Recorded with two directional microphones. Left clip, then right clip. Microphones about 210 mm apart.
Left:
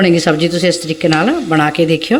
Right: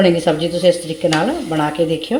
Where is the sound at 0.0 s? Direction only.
30° left (ahead or behind).